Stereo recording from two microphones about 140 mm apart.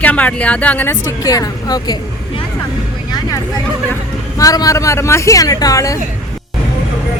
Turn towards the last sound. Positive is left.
turn(degrees=25)  # may be behind; listen again after turning